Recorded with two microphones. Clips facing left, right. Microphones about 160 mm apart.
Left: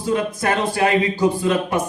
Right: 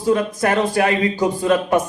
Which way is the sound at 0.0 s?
40° right (ahead or behind).